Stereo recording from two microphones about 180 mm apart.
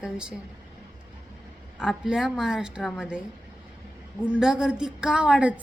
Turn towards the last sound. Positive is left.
turn(degrees=-5)  # may be behind; listen again after turning